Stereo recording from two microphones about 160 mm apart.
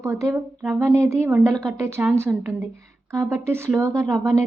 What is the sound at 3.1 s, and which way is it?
Speech, 15° right (ahead or behind).